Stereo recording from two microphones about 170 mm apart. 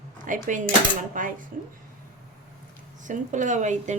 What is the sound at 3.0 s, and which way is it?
Speech, 45° right (ahead or behind).